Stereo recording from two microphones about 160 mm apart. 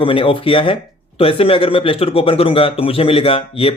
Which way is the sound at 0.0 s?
35° left (ahead or behind).